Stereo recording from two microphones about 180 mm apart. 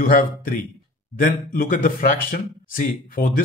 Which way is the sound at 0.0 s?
55° left (ahead or behind).